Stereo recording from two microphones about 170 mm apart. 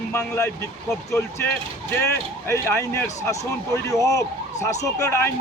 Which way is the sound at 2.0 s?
15° left (ahead or behind).